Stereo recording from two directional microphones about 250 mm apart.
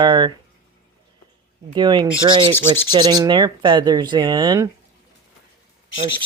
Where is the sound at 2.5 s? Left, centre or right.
Centre.